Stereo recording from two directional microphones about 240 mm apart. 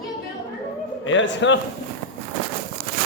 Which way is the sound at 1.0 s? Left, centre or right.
Left.